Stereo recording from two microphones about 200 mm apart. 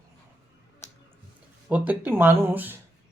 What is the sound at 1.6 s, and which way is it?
Speech, 10° right (ahead or behind).